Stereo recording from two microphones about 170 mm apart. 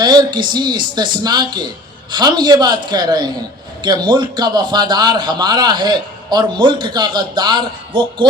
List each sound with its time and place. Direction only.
0.0 s a man's voice: 25° right (ahead or behind)